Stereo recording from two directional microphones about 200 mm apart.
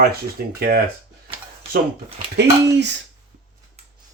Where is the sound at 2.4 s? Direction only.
60° right (ahead or behind).